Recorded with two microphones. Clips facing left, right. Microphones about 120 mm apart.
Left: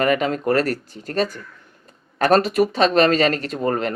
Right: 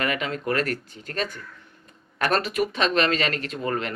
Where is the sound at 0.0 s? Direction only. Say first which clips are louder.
Left 8 dB; 40° left (ahead or behind).